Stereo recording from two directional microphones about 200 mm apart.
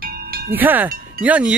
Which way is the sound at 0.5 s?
10° right (ahead or behind).